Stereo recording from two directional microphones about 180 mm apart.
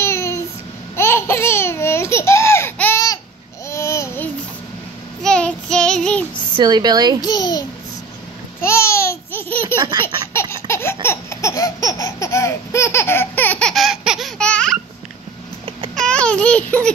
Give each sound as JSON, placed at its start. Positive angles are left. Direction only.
{"t": 0.0, "sound": "child singing", "side_deg": 15}
{"t": 0.9, "sound": "babbling", "side_deg": 15}
{"t": 5.2, "sound": "child singing", "side_deg": 5}
{"t": 6.5, "sound": "speech", "side_deg": -25}
{"t": 7.2, "sound": "a child's voice", "side_deg": 20}
{"t": 8.5, "sound": "babbling", "side_deg": 15}
{"t": 10.3, "sound": "laughter", "side_deg": 15}
{"t": 15.9, "sound": "a sound", "side_deg": 5}